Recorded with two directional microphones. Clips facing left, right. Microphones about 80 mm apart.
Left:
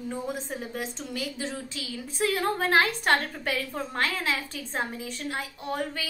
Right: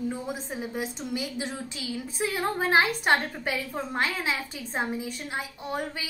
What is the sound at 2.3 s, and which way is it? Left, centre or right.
A woman's voice, centre.